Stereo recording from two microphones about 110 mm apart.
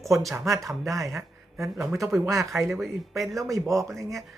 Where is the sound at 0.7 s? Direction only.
30° right (ahead or behind).